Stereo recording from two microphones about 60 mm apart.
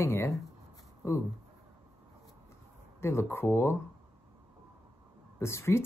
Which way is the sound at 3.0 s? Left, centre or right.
Left.